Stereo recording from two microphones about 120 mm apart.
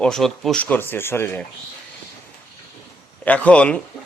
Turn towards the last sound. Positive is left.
turn(degrees=10)  # may be behind; listen again after turning